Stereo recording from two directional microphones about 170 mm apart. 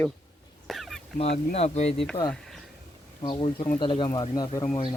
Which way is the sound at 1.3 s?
40° left (ahead or behind).